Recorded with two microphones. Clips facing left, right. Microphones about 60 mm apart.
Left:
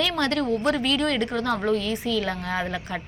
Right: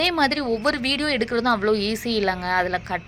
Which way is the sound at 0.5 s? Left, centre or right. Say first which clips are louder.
Even; right.